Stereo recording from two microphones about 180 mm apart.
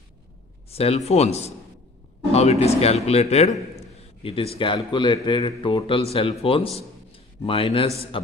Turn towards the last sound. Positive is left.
turn(degrees=30)  # may be behind; listen again after turning